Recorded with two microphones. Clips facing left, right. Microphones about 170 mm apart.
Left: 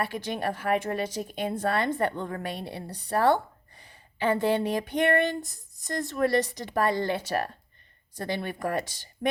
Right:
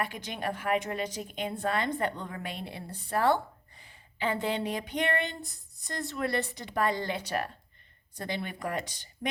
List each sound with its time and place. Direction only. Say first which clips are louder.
0.0 s a woman's voice: left 4 dB; 45° left (ahead or behind)
4.2 s a woman's voice: left 6 dB; 45° left (ahead or behind)